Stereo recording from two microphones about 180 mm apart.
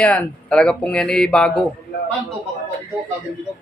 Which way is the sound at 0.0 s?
5° left (ahead or behind).